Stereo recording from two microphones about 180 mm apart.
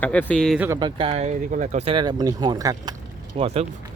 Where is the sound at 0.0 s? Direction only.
10° left (ahead or behind).